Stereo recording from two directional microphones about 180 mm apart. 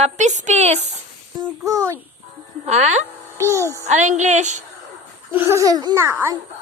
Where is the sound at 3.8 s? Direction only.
40° right (ahead or behind).